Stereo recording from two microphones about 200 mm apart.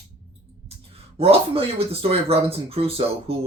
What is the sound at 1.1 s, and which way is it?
Speech, 30° right (ahead or behind).